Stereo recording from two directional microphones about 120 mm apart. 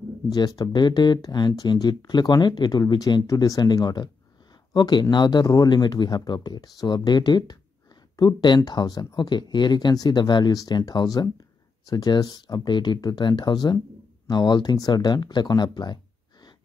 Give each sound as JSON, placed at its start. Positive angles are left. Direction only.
{"t": 0.3, "sound": "speech", "side_deg": 30}